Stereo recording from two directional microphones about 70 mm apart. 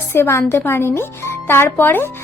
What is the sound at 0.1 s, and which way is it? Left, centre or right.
A woman's voice, left.